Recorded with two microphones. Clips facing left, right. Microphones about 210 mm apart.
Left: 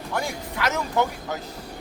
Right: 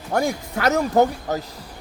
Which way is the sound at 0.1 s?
45° right (ahead or behind).